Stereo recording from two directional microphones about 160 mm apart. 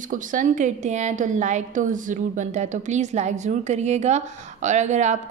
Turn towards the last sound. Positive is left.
turn(degrees=-45)  # may be behind; listen again after turning